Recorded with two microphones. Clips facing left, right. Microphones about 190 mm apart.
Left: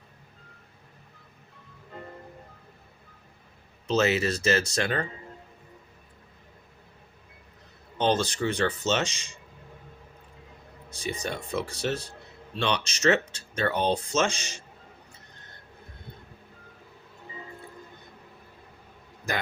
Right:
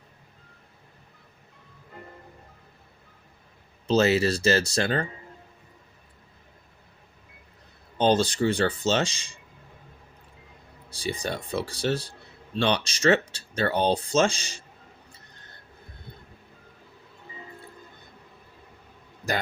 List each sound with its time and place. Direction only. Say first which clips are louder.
3.8 s speech: right 3 dB; 35° right (ahead or behind)
7.9 s speech: right 3 dB; 30° right (ahead or behind)
10.8 s speech: right 2 dB; 35° right (ahead or behind)